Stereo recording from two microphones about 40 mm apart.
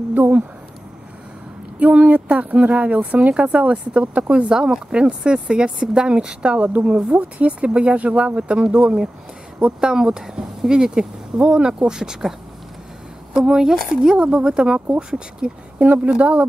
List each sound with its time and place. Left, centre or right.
0.2 s speech: right
1.8 s a woman's voice: right; by 14.1 s centre
14.1 s speech: right
15.8 s a woman's voice: right